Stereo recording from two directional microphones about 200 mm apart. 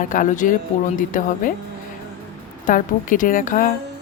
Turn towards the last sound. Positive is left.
turn(degrees=40)  # may be behind; listen again after turning